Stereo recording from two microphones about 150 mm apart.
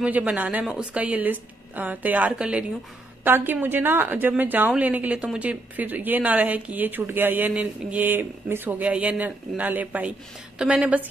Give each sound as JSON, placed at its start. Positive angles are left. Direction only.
{"t": 0.0, "sound": "a woman's voice", "side_deg": -10}